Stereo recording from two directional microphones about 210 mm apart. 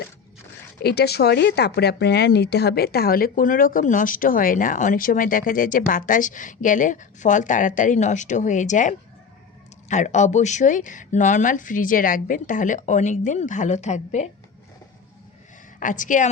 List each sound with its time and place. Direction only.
0.8 s speech: 50° left (ahead or behind); by 14.3 s 35° left (ahead or behind)
15.8 s speech: 40° left (ahead or behind)